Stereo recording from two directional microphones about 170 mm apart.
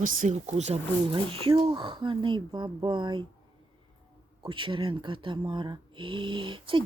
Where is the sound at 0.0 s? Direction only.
50° right (ahead or behind); by 3.2 s 25° right (ahead or behind).